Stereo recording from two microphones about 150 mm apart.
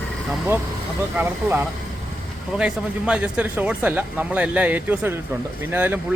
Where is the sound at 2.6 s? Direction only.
5° right (ahead or behind).